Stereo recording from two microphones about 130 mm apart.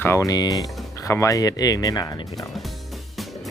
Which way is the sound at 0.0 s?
20° left (ahead or behind).